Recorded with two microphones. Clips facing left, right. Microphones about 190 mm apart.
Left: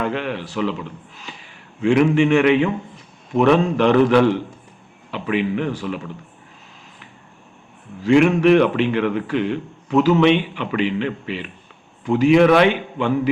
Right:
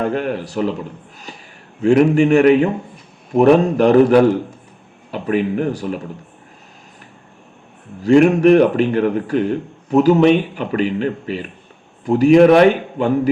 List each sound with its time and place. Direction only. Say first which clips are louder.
0.0 s a man's voice: right 4 dB; 45° right (ahead or behind)
8.0 s a man's voice: right 3 dB; 40° right (ahead or behind)